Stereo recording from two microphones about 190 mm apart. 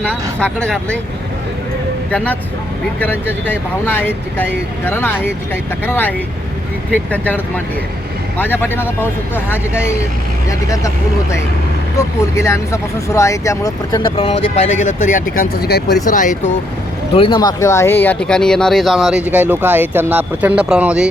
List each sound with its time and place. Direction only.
0.0 s speech: 5° left (ahead or behind)
2.0 s speech: 5° left (ahead or behind)
12.4 s speech: 15° left (ahead or behind)
14.2 s speech: 30° left (ahead or behind)
15.1 s speech: 50° left (ahead or behind)
16.0 s speech: 45° left (ahead or behind)
17.2 s speech: 25° left (ahead or behind); by 21.1 s 5° right (ahead or behind)